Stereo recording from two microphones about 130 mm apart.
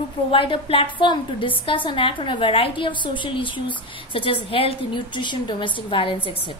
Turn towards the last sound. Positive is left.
turn(degrees=40)  # may be behind; listen again after turning